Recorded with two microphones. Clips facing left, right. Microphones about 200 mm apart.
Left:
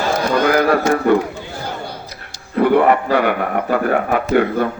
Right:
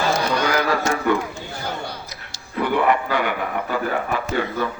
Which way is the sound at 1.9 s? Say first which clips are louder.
Left 3 dB; 55° left (ahead or behind).